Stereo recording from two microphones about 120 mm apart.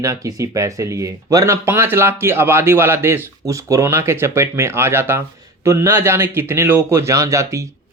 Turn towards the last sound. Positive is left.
turn(degrees=-25)  # may be behind; listen again after turning